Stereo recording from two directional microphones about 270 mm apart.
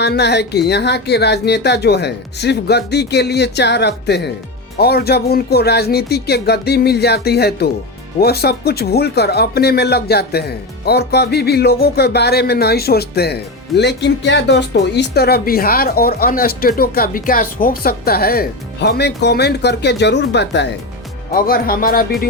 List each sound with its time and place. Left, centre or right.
0.0 s speech: left